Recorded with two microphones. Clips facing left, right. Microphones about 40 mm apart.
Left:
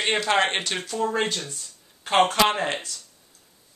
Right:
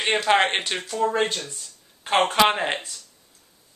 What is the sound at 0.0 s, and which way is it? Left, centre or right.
A man's voice, centre.